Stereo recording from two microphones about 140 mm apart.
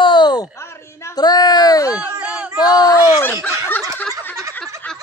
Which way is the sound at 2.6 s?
25° left (ahead or behind).